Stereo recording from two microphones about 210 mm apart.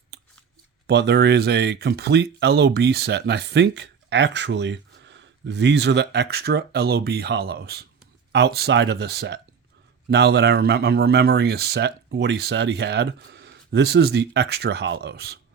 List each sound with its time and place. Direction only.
0.9 s speech: 55° right (ahead or behind)